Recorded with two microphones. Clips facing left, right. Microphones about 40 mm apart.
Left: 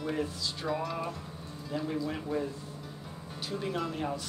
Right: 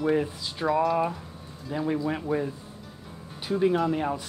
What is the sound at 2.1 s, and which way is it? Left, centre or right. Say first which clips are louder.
Speech: right 6 dB; right.